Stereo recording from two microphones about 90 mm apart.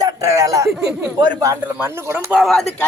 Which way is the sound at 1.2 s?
50° right (ahead or behind).